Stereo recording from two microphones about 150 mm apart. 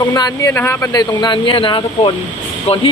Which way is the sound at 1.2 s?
35° left (ahead or behind).